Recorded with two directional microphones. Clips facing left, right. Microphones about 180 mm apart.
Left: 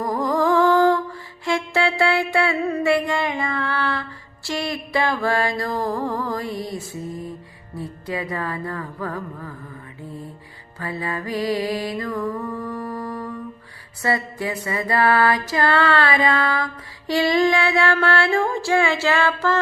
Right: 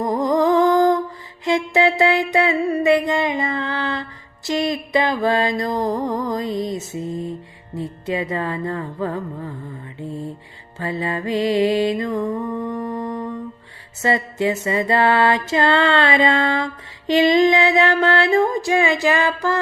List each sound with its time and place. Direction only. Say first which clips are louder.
0.0 s music: right 3 dB; 20° right (ahead or behind)
10.8 s music: right 4 dB; 25° right (ahead or behind)